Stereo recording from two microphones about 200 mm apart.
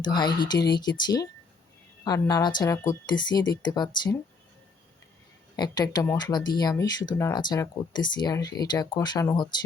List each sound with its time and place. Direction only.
0.0 s speech: 20° left (ahead or behind)
5.5 s speech: 20° left (ahead or behind)